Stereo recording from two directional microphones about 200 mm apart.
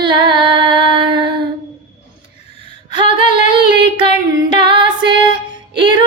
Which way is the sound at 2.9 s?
25° right (ahead or behind).